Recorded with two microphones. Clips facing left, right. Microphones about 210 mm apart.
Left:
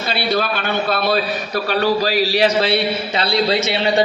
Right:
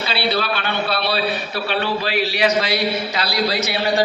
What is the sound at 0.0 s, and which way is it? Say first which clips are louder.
A man's voice: left 2 dB; 50° left (ahead or behind).